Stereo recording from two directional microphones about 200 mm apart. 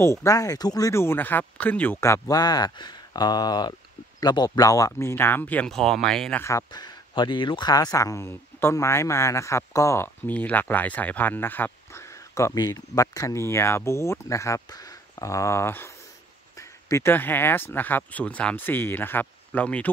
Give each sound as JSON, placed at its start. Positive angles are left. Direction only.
{"t": 0.0, "sound": "speech", "side_deg": 15}
{"t": 6.4, "sound": "speech", "side_deg": 20}